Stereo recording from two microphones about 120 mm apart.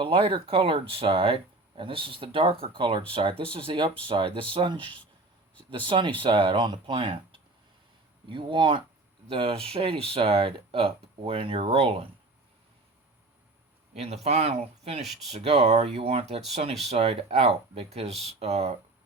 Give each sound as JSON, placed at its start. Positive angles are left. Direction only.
{"t": 0.0, "sound": "speech", "side_deg": -45}
{"t": 13.9, "sound": "speech", "side_deg": -60}
{"t": 15.0, "sound": "speech", "side_deg": 0}
{"t": 15.3, "sound": "speech", "side_deg": -60}